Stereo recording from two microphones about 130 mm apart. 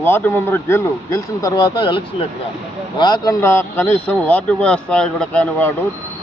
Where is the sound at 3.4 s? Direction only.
15° left (ahead or behind).